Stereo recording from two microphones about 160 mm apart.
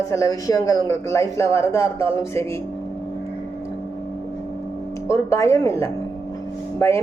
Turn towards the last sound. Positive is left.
turn(degrees=15)  # may be behind; listen again after turning